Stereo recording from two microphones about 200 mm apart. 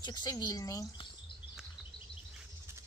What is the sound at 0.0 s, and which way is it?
Speech, 20° left (ahead or behind).